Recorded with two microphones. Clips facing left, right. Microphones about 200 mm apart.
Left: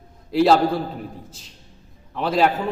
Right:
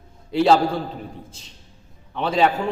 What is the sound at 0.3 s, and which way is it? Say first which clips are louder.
Speech: left 1 dB; centre (ahead or behind).